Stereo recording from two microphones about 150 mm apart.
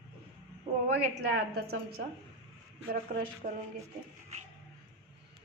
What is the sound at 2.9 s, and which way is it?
Speech, 75° right (ahead or behind).